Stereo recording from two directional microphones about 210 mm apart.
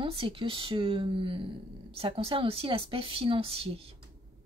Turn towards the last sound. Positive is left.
turn(degrees=-25)  # may be behind; listen again after turning